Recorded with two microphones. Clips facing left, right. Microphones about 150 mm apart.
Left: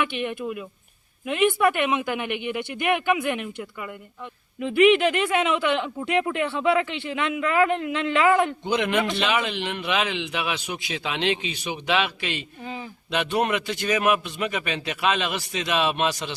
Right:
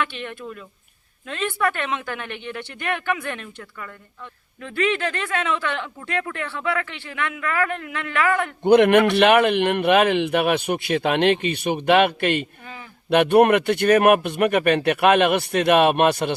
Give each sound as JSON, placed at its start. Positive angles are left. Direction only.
{"t": 0.0, "sound": "speech", "side_deg": 15}
{"t": 8.6, "sound": "speech", "side_deg": -60}